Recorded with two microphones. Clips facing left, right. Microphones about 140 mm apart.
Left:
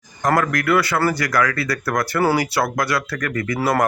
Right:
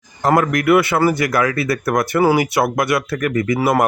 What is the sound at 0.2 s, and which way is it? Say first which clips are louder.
Speech: right 3 dB; 25° right (ahead or behind).